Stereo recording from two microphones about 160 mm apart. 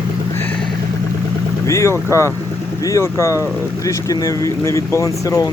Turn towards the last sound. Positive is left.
turn(degrees=20)  # may be behind; listen again after turning